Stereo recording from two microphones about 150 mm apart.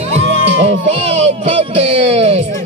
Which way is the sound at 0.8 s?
45° right (ahead or behind).